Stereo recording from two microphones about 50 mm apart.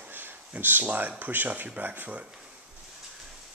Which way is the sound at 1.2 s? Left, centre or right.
Right.